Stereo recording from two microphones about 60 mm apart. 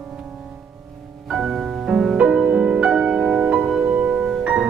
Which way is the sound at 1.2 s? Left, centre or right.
Centre.